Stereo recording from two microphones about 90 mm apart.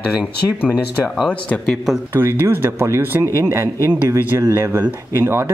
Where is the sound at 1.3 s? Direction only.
15° left (ahead or behind).